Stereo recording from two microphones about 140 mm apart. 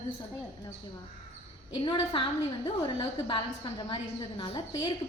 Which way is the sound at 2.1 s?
35° left (ahead or behind).